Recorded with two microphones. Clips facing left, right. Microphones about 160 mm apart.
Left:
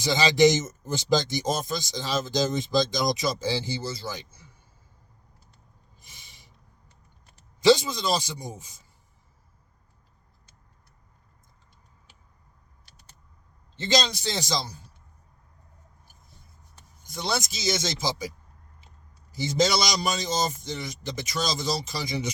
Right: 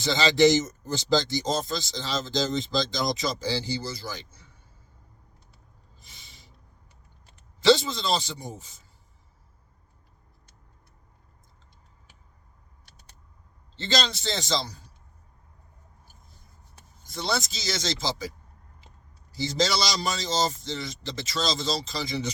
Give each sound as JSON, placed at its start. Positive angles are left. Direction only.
{"t": 0.0, "sound": "speech", "side_deg": 15}
{"t": 7.6, "sound": "a man's voice", "side_deg": 15}
{"t": 13.7, "sound": "a man's voice", "side_deg": 15}
{"t": 17.1, "sound": "a man's voice", "side_deg": 15}
{"t": 19.3, "sound": "speech", "side_deg": 20}